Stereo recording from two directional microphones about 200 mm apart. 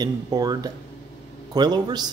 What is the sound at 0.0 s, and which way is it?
Speech, 20° right (ahead or behind).